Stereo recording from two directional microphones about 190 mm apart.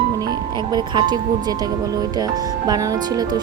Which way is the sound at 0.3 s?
20° right (ahead or behind).